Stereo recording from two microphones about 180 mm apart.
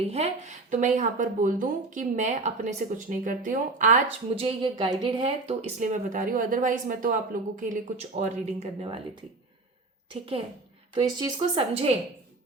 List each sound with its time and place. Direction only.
0.0 s speech: 35° right (ahead or behind)
4.4 s speech: 30° right (ahead or behind)
10.1 s speech: 30° right (ahead or behind)